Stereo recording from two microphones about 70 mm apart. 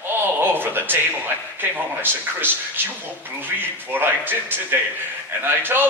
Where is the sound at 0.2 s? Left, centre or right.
Right.